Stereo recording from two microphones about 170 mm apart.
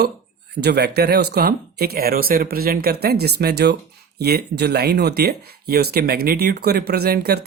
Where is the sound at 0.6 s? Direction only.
70° right (ahead or behind).